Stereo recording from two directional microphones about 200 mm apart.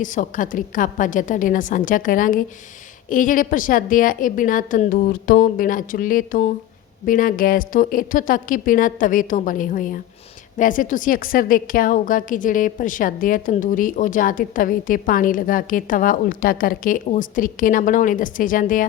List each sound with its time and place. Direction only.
0.0 s a woman's voice: 40° left (ahead or behind)